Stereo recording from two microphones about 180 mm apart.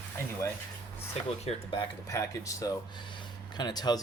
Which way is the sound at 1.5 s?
30° left (ahead or behind).